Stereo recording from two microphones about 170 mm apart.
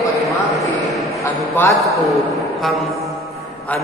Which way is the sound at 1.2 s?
15° left (ahead or behind).